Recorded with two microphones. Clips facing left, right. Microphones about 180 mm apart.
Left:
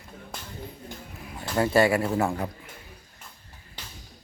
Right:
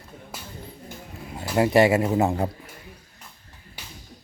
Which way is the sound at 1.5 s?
20° right (ahead or behind).